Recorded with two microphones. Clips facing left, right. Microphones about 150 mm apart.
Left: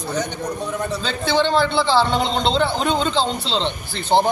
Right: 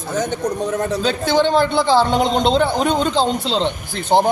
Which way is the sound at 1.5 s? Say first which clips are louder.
Right 3 dB; 50° right (ahead or behind).